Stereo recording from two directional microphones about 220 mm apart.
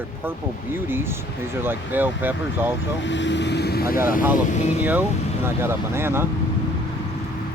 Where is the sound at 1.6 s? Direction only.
10° right (ahead or behind).